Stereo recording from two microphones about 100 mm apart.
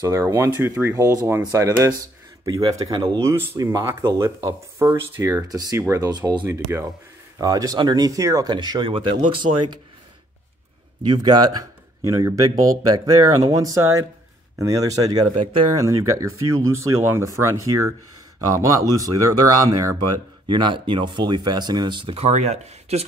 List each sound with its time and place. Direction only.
0.0 s speech: 30° right (ahead or behind)
4.7 s speech: 25° right (ahead or behind)
5.5 s speech: 35° right (ahead or behind)
5.8 s speech: 25° right (ahead or behind)
6.0 s speech: 45° right (ahead or behind)
6.4 s speech: 25° right (ahead or behind)
8.5 s speech: 45° right (ahead or behind)
8.9 s speech: 60° right (ahead or behind)
11.1 s speech: 50° right (ahead or behind)
20.4 s speech: 50° right (ahead or behind)
22.1 s speech: 90° right